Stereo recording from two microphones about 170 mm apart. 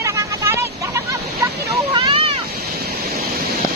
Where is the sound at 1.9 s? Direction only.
30° right (ahead or behind).